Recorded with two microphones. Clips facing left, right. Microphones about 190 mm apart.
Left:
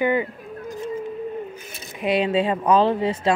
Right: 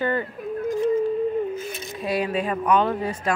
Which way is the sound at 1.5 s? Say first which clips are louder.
Right 7 dB; 20° left (ahead or behind).